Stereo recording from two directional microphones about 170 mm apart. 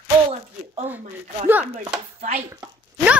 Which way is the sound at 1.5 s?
10° right (ahead or behind).